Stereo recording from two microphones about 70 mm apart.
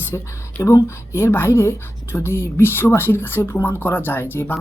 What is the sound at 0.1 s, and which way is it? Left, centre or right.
Speech, left.